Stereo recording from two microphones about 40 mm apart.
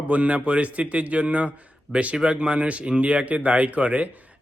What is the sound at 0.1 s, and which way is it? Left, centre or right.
Speech, right.